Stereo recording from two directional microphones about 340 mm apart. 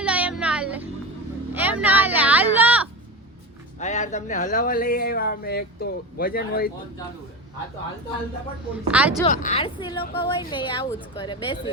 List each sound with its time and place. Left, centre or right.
0.0 s music: centre
1.5 s a sound: centre
3.8 s speech: centre
8.7 s speech: centre
9.3 s a woman's voice: left